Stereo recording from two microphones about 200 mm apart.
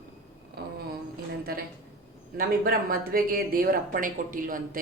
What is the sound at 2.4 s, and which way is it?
Speech, 45° right (ahead or behind).